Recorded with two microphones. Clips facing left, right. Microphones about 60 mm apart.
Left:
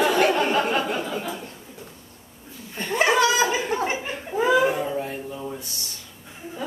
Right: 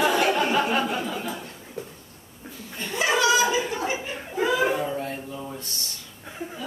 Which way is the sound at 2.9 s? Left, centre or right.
Left.